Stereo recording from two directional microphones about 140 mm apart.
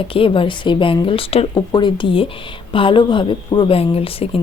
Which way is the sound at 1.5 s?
35° left (ahead or behind).